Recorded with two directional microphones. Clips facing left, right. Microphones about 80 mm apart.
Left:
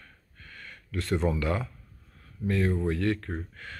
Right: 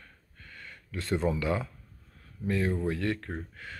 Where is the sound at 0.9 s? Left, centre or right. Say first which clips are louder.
Left 1 dB; centre.